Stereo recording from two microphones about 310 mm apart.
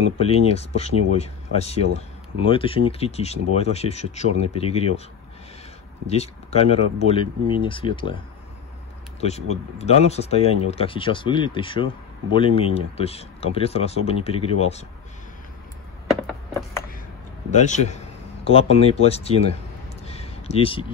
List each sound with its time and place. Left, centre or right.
0.2 s speech: centre
6.0 s speech: left
9.2 s speech: left
17.5 s a man's voice: left
20.1 s a sound: centre